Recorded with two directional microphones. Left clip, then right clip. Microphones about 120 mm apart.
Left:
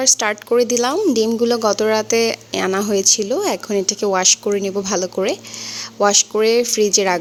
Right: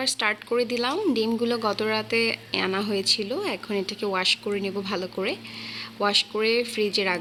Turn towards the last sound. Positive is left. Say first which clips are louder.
# left 9 dB
turn(degrees=40)  # may be behind; listen again after turning